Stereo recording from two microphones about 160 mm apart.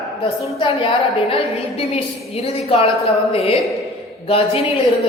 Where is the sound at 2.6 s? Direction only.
35° left (ahead or behind).